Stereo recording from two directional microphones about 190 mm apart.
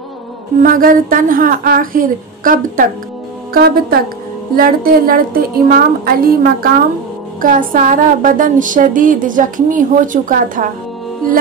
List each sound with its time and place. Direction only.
0.6 s a woman's voice: 45° right (ahead or behind)